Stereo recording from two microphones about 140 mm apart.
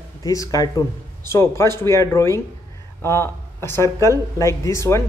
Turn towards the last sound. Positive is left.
turn(degrees=20)  # may be behind; listen again after turning